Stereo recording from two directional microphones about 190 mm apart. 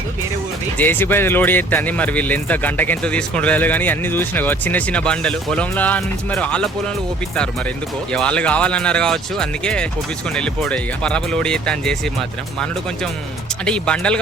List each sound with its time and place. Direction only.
0.8 s speech: 10° left (ahead or behind)
8.1 s speech: 5° left (ahead or behind)
13.7 s speech: 5° left (ahead or behind)